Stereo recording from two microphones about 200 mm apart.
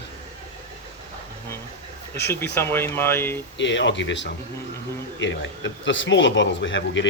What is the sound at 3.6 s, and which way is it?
Speech, 65° left (ahead or behind).